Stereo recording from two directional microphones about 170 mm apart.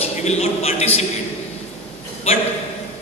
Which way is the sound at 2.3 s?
35° left (ahead or behind).